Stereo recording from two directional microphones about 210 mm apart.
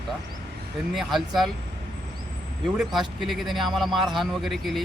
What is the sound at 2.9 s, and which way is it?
Speech, centre (ahead or behind).